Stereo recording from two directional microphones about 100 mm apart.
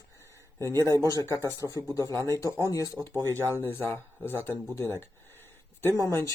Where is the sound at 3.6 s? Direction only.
20° left (ahead or behind).